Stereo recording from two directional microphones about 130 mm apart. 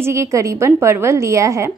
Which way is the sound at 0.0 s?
20° right (ahead or behind).